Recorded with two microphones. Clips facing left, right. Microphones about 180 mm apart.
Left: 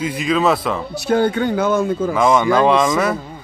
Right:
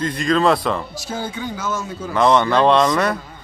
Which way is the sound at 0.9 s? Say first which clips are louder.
Left 11 dB; 65° left (ahead or behind).